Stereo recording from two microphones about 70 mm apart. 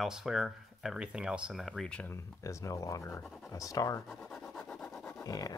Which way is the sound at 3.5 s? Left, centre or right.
Left.